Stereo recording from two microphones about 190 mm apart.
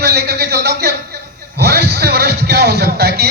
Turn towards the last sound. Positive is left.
turn(degrees=-55)  # may be behind; listen again after turning